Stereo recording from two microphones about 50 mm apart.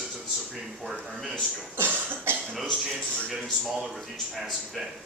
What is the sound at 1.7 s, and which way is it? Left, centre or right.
Cough, right.